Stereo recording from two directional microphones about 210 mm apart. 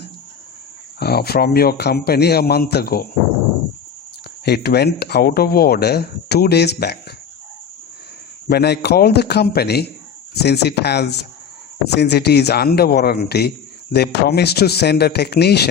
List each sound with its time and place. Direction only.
0.9 s speech: 50° left (ahead or behind)
4.4 s speech: 50° left (ahead or behind)
8.4 s speech: 50° left (ahead or behind)